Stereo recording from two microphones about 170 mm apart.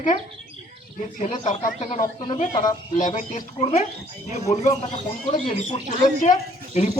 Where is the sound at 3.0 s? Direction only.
50° left (ahead or behind).